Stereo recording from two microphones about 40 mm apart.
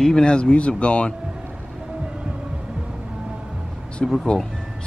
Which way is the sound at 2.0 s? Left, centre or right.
Right.